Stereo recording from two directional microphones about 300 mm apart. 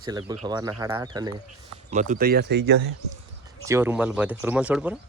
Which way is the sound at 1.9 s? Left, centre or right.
Right.